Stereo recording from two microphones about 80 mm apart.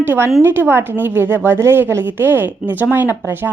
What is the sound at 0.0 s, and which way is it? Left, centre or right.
A woman's voice, right.